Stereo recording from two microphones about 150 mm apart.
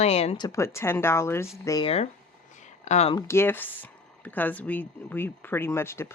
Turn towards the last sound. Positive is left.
turn(degrees=15)  # may be behind; listen again after turning